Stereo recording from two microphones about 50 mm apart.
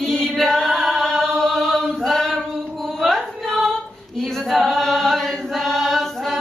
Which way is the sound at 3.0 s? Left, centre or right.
Centre.